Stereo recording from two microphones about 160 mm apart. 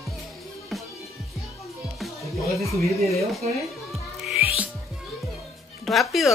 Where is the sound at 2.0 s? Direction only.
Centre (ahead or behind).